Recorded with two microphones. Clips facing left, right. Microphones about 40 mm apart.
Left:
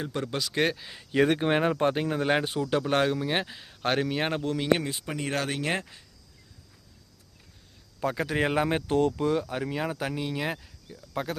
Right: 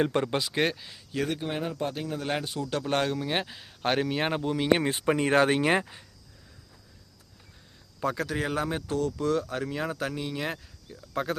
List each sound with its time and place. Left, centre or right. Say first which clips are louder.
0.2 s speech: right 3 dB; right
0.5 s speech: left 4 dB; centre
0.9 s speech: left 7 dB; left
1.4 s speech: left 7 dB; left
2.2 s speech: left 5 dB; left
2.8 s speech: left 2 dB; centre
4.8 s speech: right 7 dB; right
5.6 s speech: right 5 dB; centre
8.0 s speech: left 1 dB; centre
8.4 s speech: left 4 dB; left
9.2 s speech: left 1 dB; centre